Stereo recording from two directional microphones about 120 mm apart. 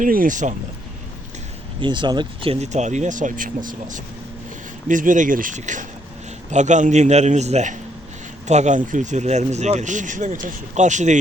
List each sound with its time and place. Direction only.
0.0 s speech: 90° right
1.8 s speech: 40° right (ahead or behind)
2.7 s a man's voice: 85° right